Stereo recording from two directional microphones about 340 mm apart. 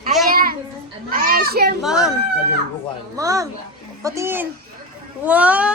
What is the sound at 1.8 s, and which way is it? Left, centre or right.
Speech, centre.